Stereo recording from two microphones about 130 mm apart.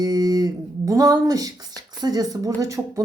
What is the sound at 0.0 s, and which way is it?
Speech, 30° right (ahead or behind).